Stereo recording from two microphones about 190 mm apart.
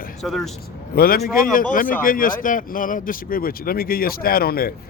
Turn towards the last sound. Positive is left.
turn(degrees=50)  # may be behind; listen again after turning